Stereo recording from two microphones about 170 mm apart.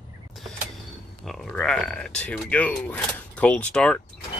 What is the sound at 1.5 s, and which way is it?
Speech, 5° left (ahead or behind).